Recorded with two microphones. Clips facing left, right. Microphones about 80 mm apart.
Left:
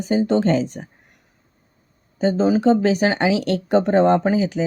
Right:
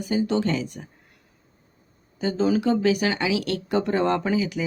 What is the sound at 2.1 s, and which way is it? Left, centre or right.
Speech, left.